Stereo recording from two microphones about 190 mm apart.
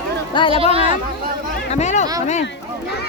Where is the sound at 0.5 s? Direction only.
30° right (ahead or behind).